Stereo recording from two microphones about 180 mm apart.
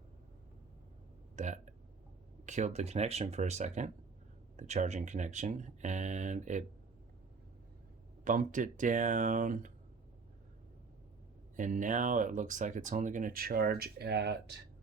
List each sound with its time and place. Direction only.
1.4 s a sound: 40° right (ahead or behind)
2.5 s speech: 40° right (ahead or behind)
8.2 s speech: 45° right (ahead or behind)
11.5 s speech: 45° right (ahead or behind); by 14.6 s 70° right (ahead or behind)